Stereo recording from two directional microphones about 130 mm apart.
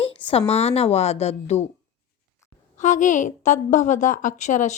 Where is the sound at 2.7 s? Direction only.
70° left (ahead or behind).